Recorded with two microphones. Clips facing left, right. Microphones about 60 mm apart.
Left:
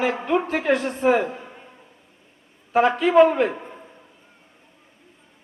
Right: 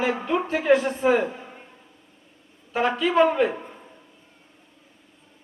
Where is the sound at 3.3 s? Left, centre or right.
Left.